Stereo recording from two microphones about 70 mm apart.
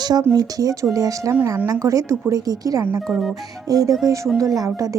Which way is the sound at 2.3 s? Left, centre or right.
Right.